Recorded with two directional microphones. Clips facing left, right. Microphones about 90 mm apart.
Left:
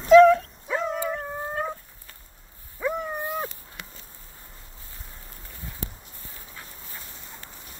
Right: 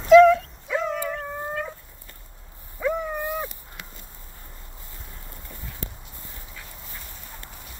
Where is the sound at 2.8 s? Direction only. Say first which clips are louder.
Right 3 dB; 5° left (ahead or behind).